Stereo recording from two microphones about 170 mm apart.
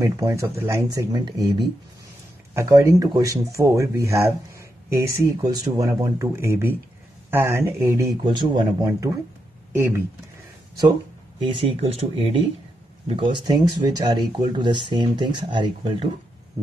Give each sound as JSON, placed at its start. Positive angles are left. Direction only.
{"t": 0.0, "sound": "speech", "side_deg": -20}
{"t": 11.4, "sound": "speech", "side_deg": -35}